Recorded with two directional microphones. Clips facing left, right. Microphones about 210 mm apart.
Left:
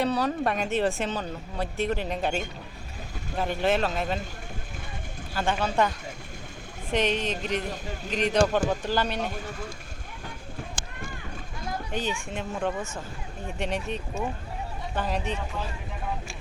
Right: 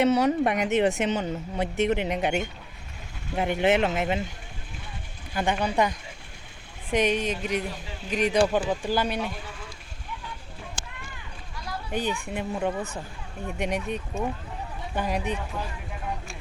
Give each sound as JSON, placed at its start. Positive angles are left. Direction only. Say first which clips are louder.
{"t": 0.0, "sound": "a woman's voice", "louder": "right 4 dB", "side_deg": -20}
{"t": 3.3, "sound": "speech", "louder": "right 3 dB", "side_deg": -20}
{"t": 5.3, "sound": "speech", "louder": "right 1 dB", "side_deg": -15}
{"t": 6.9, "sound": "speech", "louder": "right 2 dB", "side_deg": -10}
{"t": 7.6, "sound": "speech", "louder": "left 1 dB", "side_deg": 45}
{"t": 8.1, "sound": "speech", "louder": "right 1 dB", "side_deg": -10}
{"t": 9.2, "sound": "speech", "louder": "left 2 dB", "side_deg": 45}
{"t": 11.9, "sound": "a child's voice", "louder": "right 4 dB", "side_deg": -10}